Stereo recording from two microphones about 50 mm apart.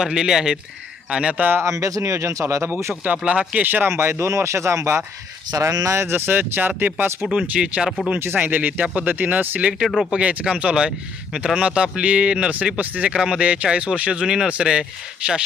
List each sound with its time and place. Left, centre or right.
0.0 s speech: centre
1.4 s speech: right
1.6 s speech: right
3.0 s speech: right
3.8 s speech: right
6.1 s speech: right
7.3 s speech: right
8.4 s speech: right
9.6 s speech: right
13.1 s speech: centre